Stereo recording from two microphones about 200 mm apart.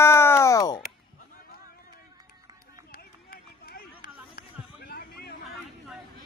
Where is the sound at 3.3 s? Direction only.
50° left (ahead or behind).